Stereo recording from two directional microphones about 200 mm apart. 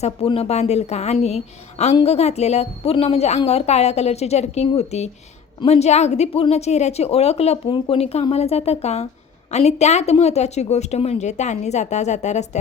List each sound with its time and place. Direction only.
0.0 s a woman's voice: 30° left (ahead or behind)